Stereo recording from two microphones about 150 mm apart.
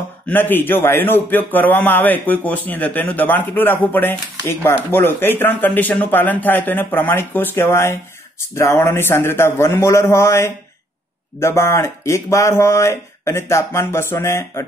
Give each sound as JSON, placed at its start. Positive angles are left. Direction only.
{"t": 0.3, "sound": "a man's voice", "side_deg": 15}